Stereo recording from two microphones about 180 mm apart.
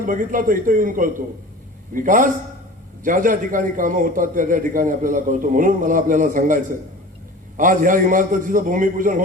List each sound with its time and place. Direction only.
0.0 s a man's voice: 50° right (ahead or behind)